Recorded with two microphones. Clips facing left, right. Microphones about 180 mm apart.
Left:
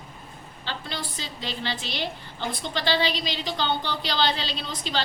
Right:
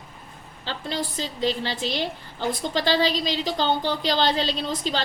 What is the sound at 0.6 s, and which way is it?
A woman's voice, 40° right (ahead or behind).